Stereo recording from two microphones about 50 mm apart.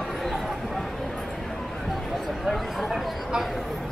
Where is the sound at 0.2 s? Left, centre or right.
Centre.